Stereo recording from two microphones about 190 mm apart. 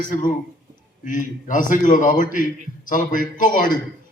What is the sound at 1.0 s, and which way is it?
A man's voice, 45° left (ahead or behind).